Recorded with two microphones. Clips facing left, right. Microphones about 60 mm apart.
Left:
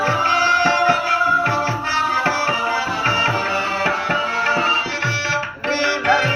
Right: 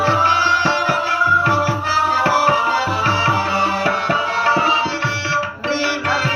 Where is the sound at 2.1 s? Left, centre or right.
Left.